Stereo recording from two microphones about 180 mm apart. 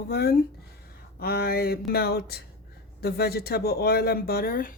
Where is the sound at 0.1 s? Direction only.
60° left (ahead or behind).